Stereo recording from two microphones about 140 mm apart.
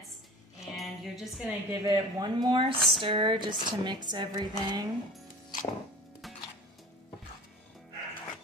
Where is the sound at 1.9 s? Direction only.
30° right (ahead or behind).